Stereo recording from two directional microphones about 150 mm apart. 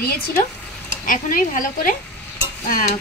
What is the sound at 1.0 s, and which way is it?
Speech, 65° left (ahead or behind).